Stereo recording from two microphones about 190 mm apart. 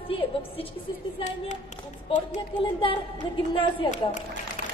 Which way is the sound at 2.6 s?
25° left (ahead or behind).